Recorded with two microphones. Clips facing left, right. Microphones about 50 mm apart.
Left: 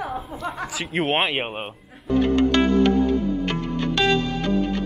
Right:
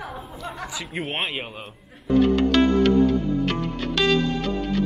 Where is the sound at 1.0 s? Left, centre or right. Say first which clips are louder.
Left 8 dB; left.